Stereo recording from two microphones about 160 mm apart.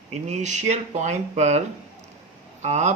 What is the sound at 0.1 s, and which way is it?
Speech, 45° right (ahead or behind).